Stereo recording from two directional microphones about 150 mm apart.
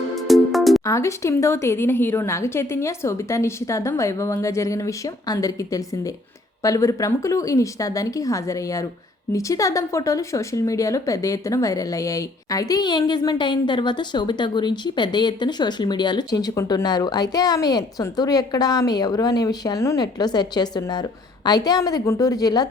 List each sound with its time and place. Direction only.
0.2 s music: centre (ahead or behind)
0.9 s speech: 20° left (ahead or behind)